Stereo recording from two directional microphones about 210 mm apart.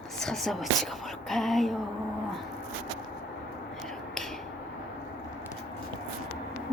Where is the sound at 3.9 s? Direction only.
Centre (ahead or behind).